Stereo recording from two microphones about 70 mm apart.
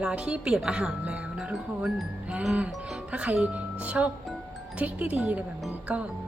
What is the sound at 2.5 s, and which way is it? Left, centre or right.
Speech, centre.